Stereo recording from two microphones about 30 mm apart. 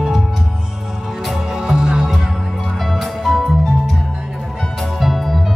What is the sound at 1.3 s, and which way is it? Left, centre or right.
Music, centre.